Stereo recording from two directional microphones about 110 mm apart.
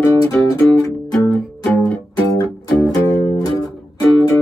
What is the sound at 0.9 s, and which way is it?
Music, 10° left (ahead or behind).